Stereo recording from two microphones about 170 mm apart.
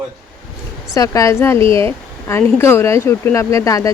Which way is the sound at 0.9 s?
20° left (ahead or behind).